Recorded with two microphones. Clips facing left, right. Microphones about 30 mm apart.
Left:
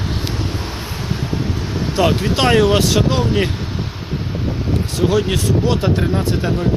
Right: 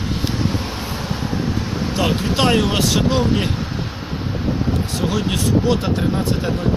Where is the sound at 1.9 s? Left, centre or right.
Left.